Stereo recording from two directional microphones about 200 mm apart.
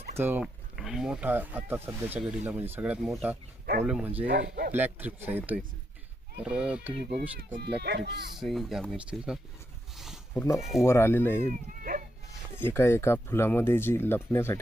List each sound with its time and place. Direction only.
0.2 s speech: 10° right (ahead or behind)
6.4 s speech: 5° right (ahead or behind)
7.2 s speech: 50° right (ahead or behind)
8.4 s speech: centre (ahead or behind)
9.9 s a sound: centre (ahead or behind)
10.3 s speech: 15° left (ahead or behind)
10.6 s speech: centre (ahead or behind)
10.8 s speech: 15° left (ahead or behind)
11.4 s cat: 40° right (ahead or behind)
12.5 s speech: 10° left (ahead or behind)